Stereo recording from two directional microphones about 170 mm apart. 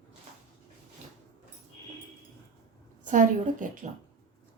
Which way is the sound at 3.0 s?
50° right (ahead or behind).